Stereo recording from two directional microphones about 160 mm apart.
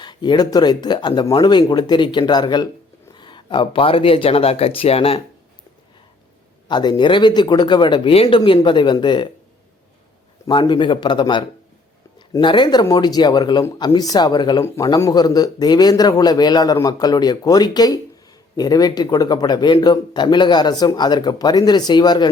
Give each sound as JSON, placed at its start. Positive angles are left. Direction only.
{"t": 0.0, "sound": "speech", "side_deg": 30}
{"t": 6.7, "sound": "speech", "side_deg": 25}
{"t": 10.4, "sound": "speech", "side_deg": 30}